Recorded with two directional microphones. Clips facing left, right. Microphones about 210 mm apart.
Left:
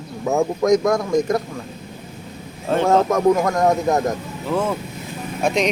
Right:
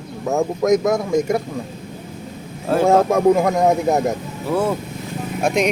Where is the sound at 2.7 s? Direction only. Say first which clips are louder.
Right 2 dB; 10° right (ahead or behind).